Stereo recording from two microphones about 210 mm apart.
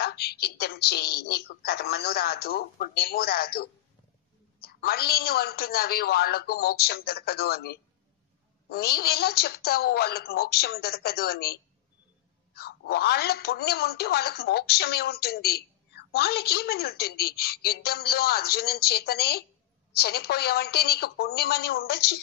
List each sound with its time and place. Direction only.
0.0 s speech: 50° left (ahead or behind)